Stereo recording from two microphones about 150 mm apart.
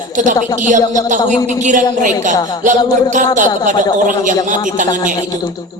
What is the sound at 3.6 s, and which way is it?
A man's voice, 60° right (ahead or behind).